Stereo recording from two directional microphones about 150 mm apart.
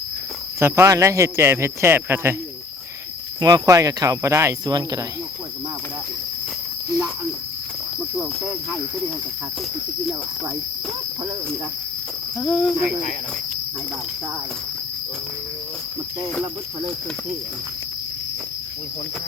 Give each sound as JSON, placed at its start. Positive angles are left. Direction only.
{"t": 0.6, "sound": "speech", "side_deg": -20}
{"t": 3.4, "sound": "speech", "side_deg": -25}
{"t": 12.4, "sound": "speech", "side_deg": 0}